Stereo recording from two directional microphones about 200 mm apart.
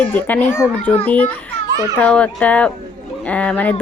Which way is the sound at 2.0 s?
5° left (ahead or behind).